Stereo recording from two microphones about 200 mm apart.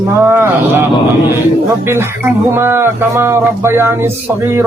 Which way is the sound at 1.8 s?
10° right (ahead or behind).